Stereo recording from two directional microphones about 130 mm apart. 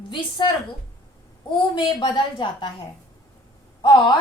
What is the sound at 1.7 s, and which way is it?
Speech, 40° left (ahead or behind).